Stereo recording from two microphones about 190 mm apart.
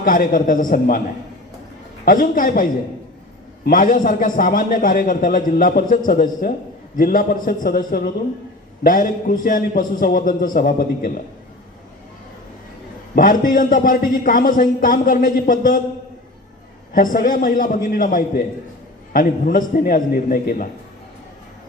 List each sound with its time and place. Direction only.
0.0 s a man's voice: 45° left (ahead or behind)
2.0 s a man's voice: 45° left (ahead or behind)
3.7 s a man's voice: 45° left (ahead or behind)
13.1 s a man's voice: 45° left (ahead or behind)
16.9 s a man's voice: 45° left (ahead or behind)